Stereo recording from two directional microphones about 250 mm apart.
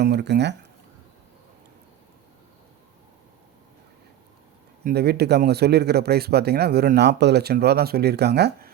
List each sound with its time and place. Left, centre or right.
0.0 s speech: right
4.8 s speech: right